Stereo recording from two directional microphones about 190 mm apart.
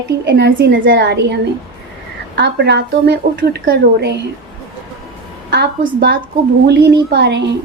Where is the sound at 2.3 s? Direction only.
60° right (ahead or behind).